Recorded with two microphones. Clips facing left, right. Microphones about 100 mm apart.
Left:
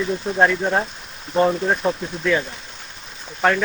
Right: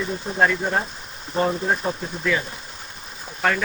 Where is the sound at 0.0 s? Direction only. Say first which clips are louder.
Left 3 dB; centre (ahead or behind).